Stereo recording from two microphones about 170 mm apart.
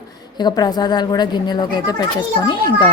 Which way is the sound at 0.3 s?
25° left (ahead or behind).